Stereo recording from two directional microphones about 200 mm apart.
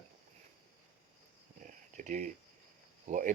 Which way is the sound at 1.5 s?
40° right (ahead or behind).